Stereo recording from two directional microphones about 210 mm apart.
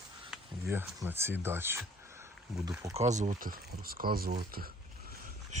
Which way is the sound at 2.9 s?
35° right (ahead or behind).